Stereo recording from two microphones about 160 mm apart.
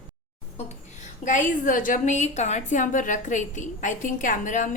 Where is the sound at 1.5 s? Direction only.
55° left (ahead or behind).